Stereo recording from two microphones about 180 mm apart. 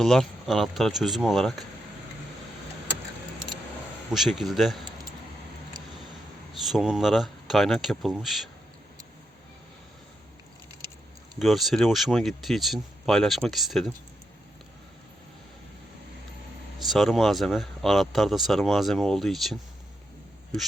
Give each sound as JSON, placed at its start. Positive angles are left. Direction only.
{"t": 0.0, "sound": "speech", "side_deg": 0}
{"t": 4.1, "sound": "speech", "side_deg": 0}
{"t": 5.7, "sound": "vehicle", "side_deg": -25}
{"t": 6.5, "sound": "speech", "side_deg": 0}
{"t": 11.3, "sound": "speech", "side_deg": 0}
{"t": 16.7, "sound": "speech", "side_deg": 0}